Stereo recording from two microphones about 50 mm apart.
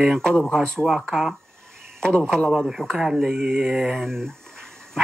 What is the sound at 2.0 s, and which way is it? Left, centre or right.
Speech, centre.